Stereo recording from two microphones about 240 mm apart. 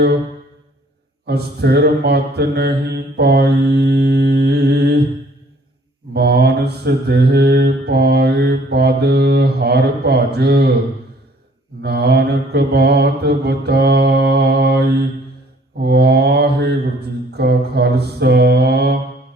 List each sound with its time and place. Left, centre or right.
1.2 s mantra: right
6.1 s mantra: right
11.8 s mantra: right